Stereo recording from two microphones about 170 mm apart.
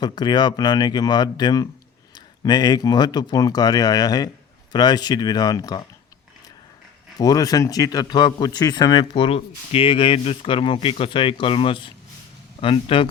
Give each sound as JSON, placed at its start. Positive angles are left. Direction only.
{"t": 0.0, "sound": "a man's voice", "side_deg": 25}
{"t": 7.2, "sound": "a man's voice", "side_deg": 20}